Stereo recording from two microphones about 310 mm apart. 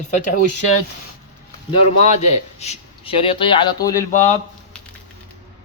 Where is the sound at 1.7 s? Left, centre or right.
Left.